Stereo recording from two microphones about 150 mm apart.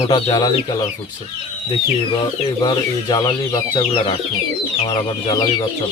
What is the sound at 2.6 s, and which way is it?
Speech, 30° left (ahead or behind).